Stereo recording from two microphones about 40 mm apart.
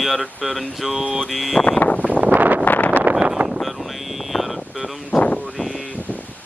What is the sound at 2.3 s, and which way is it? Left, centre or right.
Wind noise, right.